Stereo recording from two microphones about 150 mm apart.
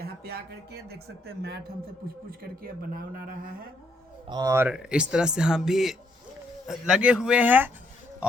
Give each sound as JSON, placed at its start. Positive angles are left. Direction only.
{"t": 0.0, "sound": "speech", "side_deg": -90}
{"t": 2.4, "sound": "speech", "side_deg": -75}
{"t": 4.3, "sound": "speech", "side_deg": -25}
{"t": 4.7, "sound": "speech", "side_deg": -5}